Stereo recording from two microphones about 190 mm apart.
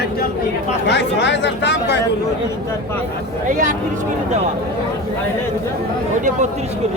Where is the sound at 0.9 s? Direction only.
65° left (ahead or behind).